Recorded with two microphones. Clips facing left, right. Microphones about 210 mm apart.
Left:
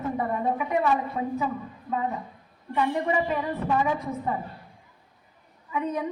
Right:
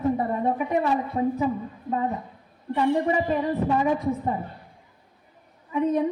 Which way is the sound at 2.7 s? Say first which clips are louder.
Right 3 dB; 35° right (ahead or behind).